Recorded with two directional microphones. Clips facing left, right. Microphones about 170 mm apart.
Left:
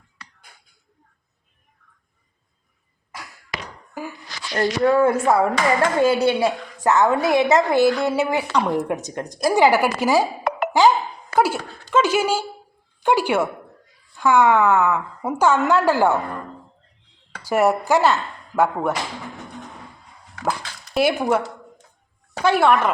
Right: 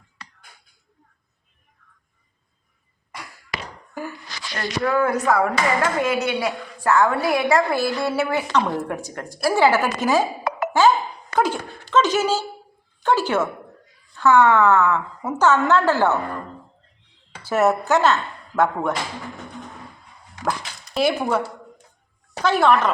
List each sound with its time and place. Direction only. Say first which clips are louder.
4.5 s a woman's voice: left 5 dB; 25° left (ahead or behind); by 10.2 s 10° left (ahead or behind)
10.7 s a sound: left 1 dB; 15° left (ahead or behind)
14.2 s a woman's voice: right 1 dB; 10° left (ahead or behind)
17.4 s speech: left 1 dB; 10° left (ahead or behind)
20.9 s a woman's voice: left 2 dB; 5° left (ahead or behind)